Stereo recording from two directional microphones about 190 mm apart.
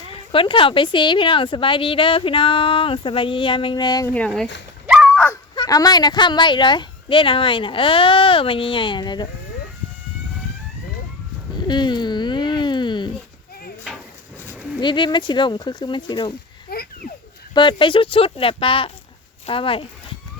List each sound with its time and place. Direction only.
0.1 s speech: 30° left (ahead or behind)
4.9 s dog: centre (ahead or behind)
5.5 s speech: 20° left (ahead or behind)
11.5 s a sound: 25° left (ahead or behind)
14.8 s speech: 25° left (ahead or behind)
16.6 s a sound: 55° left (ahead or behind)
17.5 s speech: 25° left (ahead or behind)